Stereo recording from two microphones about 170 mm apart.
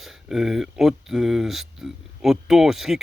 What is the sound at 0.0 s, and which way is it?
Speech, 5° right (ahead or behind).